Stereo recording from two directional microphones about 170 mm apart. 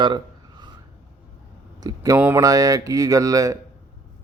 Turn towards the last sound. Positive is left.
turn(degrees=-20)  # may be behind; listen again after turning